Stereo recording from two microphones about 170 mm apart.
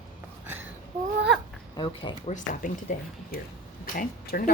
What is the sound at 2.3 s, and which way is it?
Speech, 50° left (ahead or behind).